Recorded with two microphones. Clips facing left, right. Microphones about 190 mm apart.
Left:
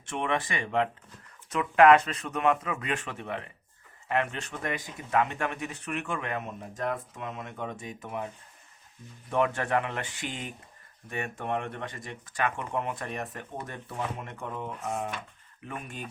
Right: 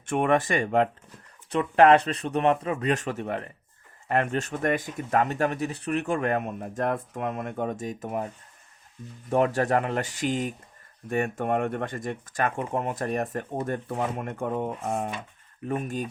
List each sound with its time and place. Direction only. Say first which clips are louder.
0.0 s speech: right 7 dB; 50° right (ahead or behind)
1.5 s speech: right 2 dB; 35° right (ahead or behind)
9.3 s speech: right 4 dB; 40° right (ahead or behind)